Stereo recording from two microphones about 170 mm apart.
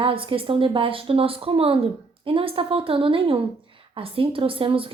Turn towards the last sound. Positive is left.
turn(degrees=-30)  # may be behind; listen again after turning